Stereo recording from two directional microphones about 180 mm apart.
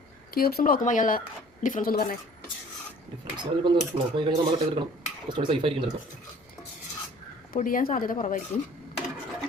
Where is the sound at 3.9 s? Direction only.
30° right (ahead or behind).